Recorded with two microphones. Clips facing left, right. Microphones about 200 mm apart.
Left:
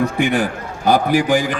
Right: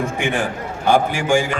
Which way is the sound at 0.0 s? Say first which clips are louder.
Left 4 dB; 40° left (ahead or behind).